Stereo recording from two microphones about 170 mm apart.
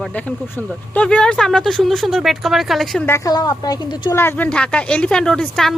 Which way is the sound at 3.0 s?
15° left (ahead or behind).